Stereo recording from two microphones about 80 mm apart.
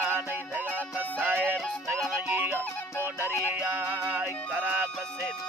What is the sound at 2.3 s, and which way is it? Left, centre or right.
Music, right.